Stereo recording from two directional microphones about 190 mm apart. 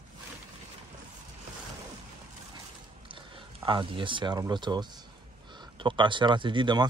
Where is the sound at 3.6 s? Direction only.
25° right (ahead or behind).